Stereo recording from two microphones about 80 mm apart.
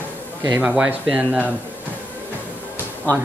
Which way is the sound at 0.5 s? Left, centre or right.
Centre.